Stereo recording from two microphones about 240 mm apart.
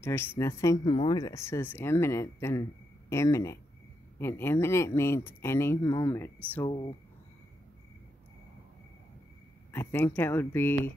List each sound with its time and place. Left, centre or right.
0.0 s speech: centre
9.7 s speech: centre